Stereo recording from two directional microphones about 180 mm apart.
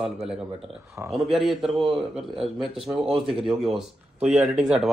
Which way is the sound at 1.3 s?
Centre (ahead or behind).